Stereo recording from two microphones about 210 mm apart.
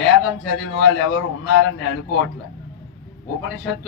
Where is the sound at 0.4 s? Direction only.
60° left (ahead or behind).